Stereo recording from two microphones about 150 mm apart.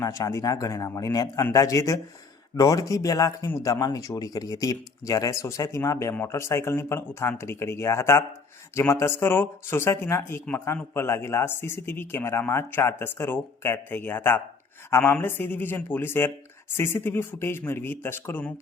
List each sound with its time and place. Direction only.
0.0 s speech: 20° left (ahead or behind)